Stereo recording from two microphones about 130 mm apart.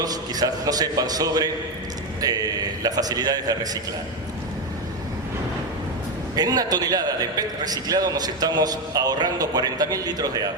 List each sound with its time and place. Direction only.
0.0 s a man's voice: 30° right (ahead or behind)
6.3 s a man's voice: 30° right (ahead or behind)